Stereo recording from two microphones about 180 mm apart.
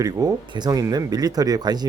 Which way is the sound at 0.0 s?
20° right (ahead or behind).